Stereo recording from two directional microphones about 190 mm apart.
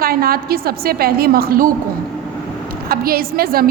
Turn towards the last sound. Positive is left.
turn(degrees=-50)  # may be behind; listen again after turning